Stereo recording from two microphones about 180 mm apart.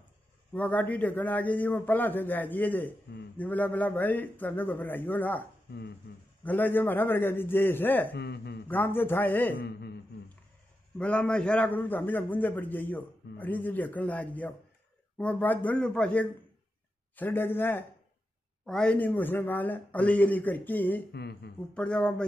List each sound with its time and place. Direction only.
0.5 s a man's voice: 10° left (ahead or behind)
5.7 s speech: 65° left (ahead or behind)
6.4 s a man's voice: 10° left (ahead or behind)
8.1 s speech: 65° left (ahead or behind)
8.6 s a man's voice: 10° left (ahead or behind)
9.6 s speech: 65° left (ahead or behind)
11.0 s a man's voice: 5° left (ahead or behind)
21.1 s speech: 65° left (ahead or behind)
21.7 s speech: 5° left (ahead or behind)